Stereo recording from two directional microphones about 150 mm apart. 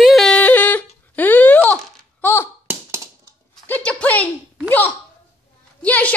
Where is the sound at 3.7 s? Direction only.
10° left (ahead or behind).